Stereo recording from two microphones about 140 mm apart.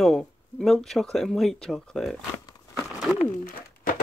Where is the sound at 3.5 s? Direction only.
80° left.